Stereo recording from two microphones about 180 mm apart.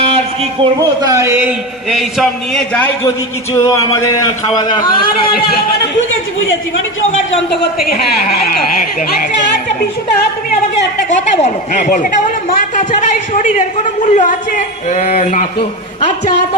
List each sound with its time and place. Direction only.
0.0 s a man's voice: 30° right (ahead or behind)
1.1 s a man's voice: 15° right (ahead or behind); by 4.9 s 20° left (ahead or behind)
7.1 s a man's voice: 80° left; by 8.5 s 60° left (ahead or behind)
11.4 s a man's voice: 45° left (ahead or behind)